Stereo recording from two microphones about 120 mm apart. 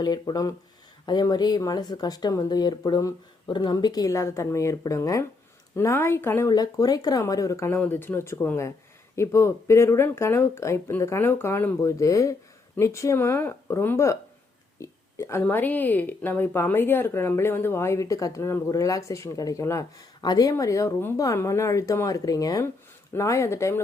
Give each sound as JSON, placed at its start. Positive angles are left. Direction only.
{"t": 0.0, "sound": "speech", "side_deg": 35}
{"t": 6.5, "sound": "speech", "side_deg": 35}